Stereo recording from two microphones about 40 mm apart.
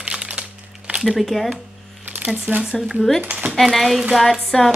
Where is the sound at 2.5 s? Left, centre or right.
Right.